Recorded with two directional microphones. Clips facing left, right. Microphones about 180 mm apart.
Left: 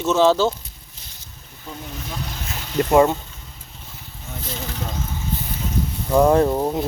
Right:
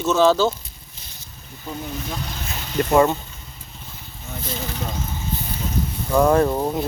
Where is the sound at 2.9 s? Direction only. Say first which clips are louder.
Left 1 dB; 15° left (ahead or behind).